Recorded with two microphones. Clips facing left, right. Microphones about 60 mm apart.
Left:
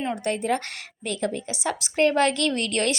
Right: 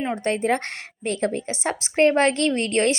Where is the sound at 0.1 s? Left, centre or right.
Right.